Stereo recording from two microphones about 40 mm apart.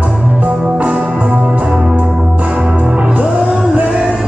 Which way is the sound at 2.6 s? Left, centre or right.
Centre.